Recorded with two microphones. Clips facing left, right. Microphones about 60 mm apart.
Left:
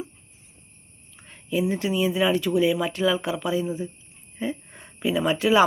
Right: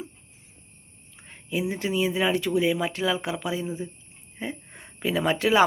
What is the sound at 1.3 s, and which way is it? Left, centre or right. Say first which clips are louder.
Speech: left 4 dB; right.